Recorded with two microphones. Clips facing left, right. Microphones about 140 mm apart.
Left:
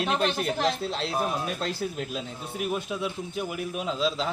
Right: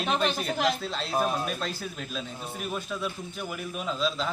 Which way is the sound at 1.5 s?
25° left (ahead or behind).